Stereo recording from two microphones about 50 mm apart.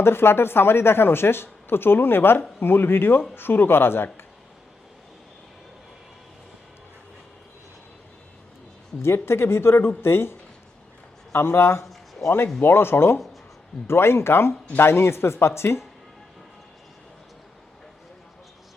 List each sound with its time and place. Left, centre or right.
0.0 s speech: left
9.0 s speech: left